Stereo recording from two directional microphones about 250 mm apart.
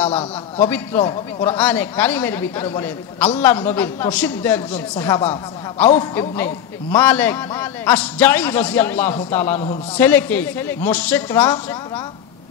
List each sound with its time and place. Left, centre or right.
0.6 s a man's voice: centre